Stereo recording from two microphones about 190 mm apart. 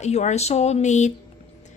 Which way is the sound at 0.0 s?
35° left (ahead or behind).